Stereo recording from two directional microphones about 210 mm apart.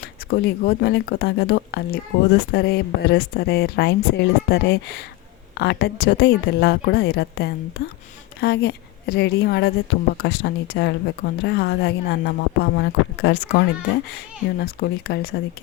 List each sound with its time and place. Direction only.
0.0 s speech: 50° left (ahead or behind)
14.6 s speech: 50° left (ahead or behind)